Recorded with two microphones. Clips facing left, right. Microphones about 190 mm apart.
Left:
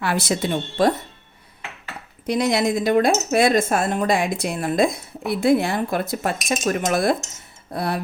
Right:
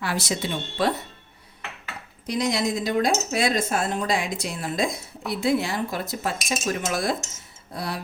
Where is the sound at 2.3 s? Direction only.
60° left (ahead or behind).